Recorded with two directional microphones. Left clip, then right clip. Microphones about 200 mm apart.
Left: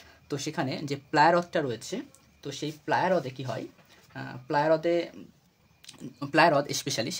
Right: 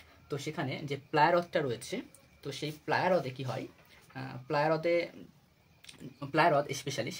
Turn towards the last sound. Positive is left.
turn(degrees=40)  # may be behind; listen again after turning